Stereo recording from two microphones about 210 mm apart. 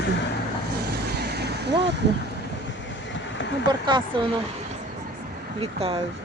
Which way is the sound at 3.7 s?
20° right (ahead or behind).